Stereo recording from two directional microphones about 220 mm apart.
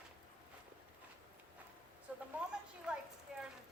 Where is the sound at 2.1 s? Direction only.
5° right (ahead or behind).